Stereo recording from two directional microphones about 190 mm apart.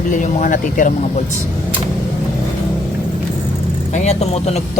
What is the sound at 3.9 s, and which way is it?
Speech, 35° left (ahead or behind).